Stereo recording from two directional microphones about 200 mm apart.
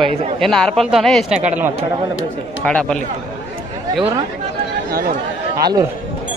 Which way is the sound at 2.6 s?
5° left (ahead or behind).